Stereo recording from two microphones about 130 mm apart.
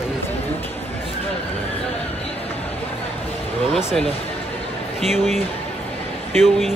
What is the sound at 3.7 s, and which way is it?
Speech, centre (ahead or behind).